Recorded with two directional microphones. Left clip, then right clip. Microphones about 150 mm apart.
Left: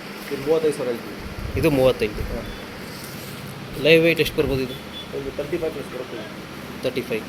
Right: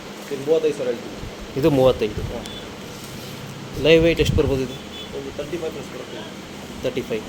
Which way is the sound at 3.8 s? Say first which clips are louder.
Even; 20° right (ahead or behind).